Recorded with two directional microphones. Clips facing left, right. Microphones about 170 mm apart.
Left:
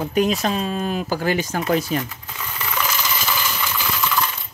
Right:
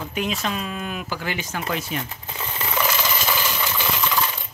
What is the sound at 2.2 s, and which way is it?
Coin, 25° right (ahead or behind).